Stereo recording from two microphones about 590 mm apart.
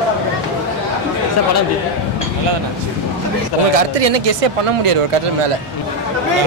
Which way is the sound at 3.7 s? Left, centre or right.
Right.